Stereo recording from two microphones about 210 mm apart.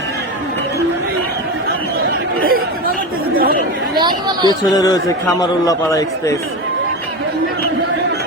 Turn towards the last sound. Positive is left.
turn(degrees=15)  # may be behind; listen again after turning